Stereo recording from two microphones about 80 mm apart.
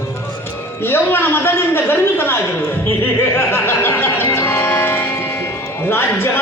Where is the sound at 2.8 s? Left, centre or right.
Left.